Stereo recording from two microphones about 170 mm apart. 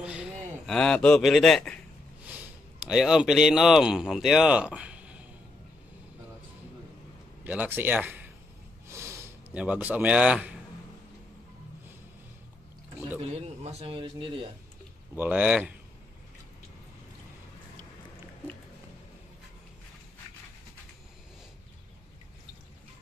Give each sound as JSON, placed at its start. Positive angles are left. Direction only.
{"t": 0.0, "sound": "a man's voice", "side_deg": -5}
{"t": 7.4, "sound": "speech", "side_deg": -10}
{"t": 8.8, "sound": "a sound", "side_deg": -15}
{"t": 13.3, "sound": "speech", "side_deg": -40}
{"t": 15.1, "sound": "speech", "side_deg": -10}